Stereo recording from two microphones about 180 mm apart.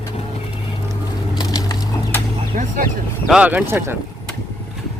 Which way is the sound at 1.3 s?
20° left (ahead or behind).